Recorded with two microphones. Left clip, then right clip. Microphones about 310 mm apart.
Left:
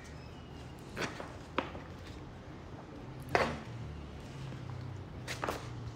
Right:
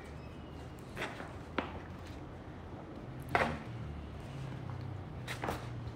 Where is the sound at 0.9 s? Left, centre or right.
Centre.